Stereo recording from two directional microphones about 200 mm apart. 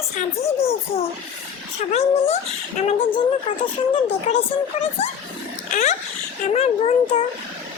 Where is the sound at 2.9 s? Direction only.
25° left (ahead or behind).